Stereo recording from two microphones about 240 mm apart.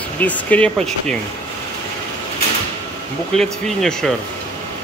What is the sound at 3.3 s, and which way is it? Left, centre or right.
Speech, centre.